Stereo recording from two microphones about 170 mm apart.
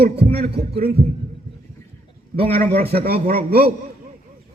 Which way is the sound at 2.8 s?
65° right (ahead or behind).